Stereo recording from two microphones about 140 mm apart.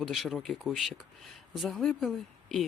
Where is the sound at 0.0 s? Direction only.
Centre (ahead or behind).